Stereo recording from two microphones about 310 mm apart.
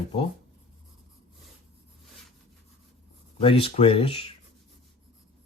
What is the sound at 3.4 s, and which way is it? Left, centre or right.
Speech, centre.